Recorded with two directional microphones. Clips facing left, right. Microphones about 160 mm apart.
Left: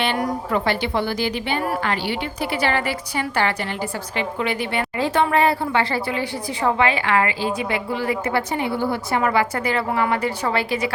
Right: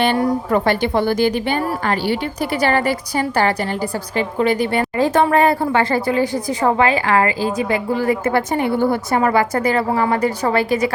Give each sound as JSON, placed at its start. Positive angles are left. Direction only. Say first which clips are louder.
{"t": 0.5, "sound": "a woman's voice", "louder": "right 4 dB", "side_deg": -45}